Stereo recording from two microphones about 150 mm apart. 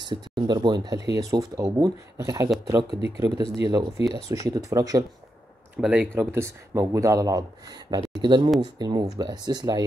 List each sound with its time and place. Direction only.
0.5 s speech: 25° right (ahead or behind)
5.8 s speech: 5° right (ahead or behind); by 9.8 s 25° right (ahead or behind)